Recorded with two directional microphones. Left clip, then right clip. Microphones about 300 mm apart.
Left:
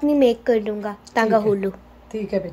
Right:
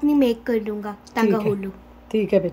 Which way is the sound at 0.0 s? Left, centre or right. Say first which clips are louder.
Left 3 dB; centre.